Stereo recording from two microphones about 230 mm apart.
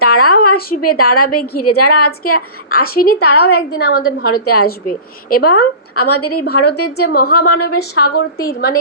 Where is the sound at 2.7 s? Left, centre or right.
Left.